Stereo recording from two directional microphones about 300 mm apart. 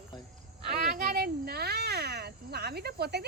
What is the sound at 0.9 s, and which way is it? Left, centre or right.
Speech, right.